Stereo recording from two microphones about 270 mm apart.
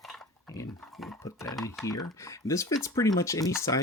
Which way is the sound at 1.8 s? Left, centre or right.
Centre.